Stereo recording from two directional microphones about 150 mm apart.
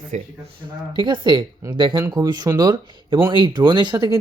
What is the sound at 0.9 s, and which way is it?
A man's voice, 30° right (ahead or behind).